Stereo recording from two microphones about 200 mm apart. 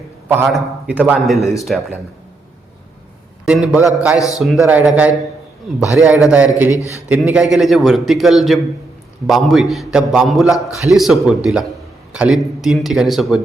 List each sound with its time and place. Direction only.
0.4 s a man's voice: 5° right (ahead or behind)
3.4 s a man's voice: 5° right (ahead or behind)
6.7 s a man's voice: 15° left (ahead or behind)
7.1 s a man's voice: 5° right (ahead or behind)
10.5 s a man's voice: 15° left (ahead or behind)
10.9 s a man's voice: centre (ahead or behind)